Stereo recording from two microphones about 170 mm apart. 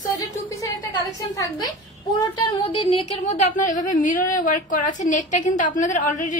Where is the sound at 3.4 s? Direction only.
50° left (ahead or behind).